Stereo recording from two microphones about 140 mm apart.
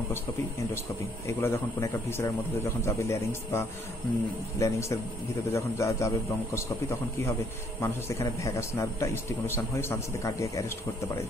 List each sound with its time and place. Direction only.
1.2 s a man's voice: 20° left (ahead or behind)